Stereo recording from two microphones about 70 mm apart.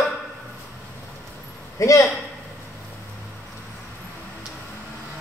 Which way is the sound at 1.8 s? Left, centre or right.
Left.